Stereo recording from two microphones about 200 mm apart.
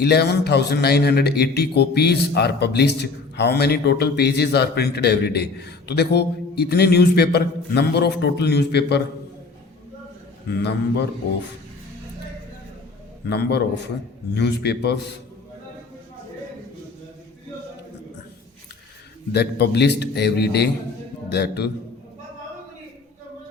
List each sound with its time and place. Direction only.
0.0 s a man's voice: 55° left (ahead or behind)
10.6 s a man's voice: 55° left (ahead or behind)
13.2 s a man's voice: 55° left (ahead or behind)
19.3 s a man's voice: 55° left (ahead or behind)